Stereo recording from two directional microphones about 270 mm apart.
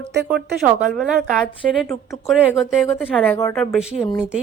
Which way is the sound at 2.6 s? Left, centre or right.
Centre.